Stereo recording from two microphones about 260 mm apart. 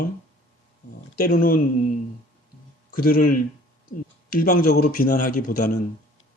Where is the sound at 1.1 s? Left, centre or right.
Left.